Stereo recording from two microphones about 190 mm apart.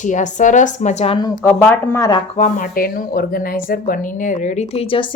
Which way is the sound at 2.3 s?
40° left (ahead or behind).